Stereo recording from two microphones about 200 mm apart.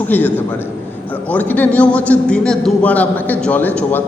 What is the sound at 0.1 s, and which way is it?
A man's voice, 10° left (ahead or behind).